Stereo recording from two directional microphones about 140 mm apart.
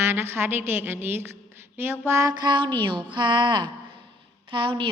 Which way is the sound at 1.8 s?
20° right (ahead or behind).